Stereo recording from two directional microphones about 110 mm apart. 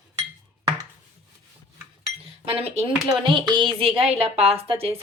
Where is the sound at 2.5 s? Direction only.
60° right (ahead or behind).